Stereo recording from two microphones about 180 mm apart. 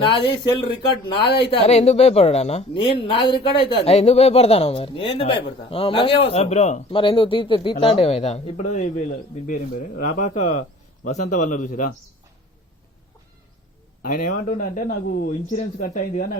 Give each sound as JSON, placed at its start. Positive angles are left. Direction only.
{"t": 0.0, "sound": "speech", "side_deg": 25}
{"t": 6.9, "sound": "speech", "side_deg": 25}
{"t": 9.5, "sound": "speech", "side_deg": 50}
{"t": 14.0, "sound": "speech", "side_deg": 50}